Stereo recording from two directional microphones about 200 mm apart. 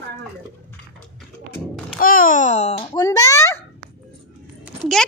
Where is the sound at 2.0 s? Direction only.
45° left (ahead or behind).